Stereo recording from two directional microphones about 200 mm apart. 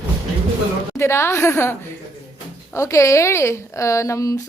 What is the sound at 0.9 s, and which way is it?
A woman's voice, 15° left (ahead or behind).